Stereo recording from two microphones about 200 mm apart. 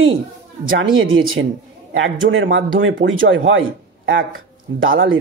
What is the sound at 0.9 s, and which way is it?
Speech, 85° right.